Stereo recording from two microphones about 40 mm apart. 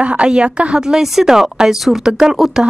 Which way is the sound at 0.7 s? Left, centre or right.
Centre.